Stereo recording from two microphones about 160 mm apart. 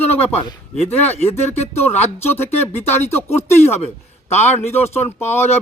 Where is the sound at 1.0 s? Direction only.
40° left (ahead or behind).